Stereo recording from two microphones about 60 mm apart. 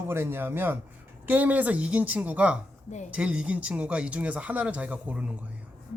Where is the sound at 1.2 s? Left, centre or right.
Right.